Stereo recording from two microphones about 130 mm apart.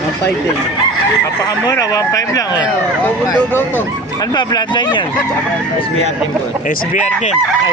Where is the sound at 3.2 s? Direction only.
20° left (ahead or behind).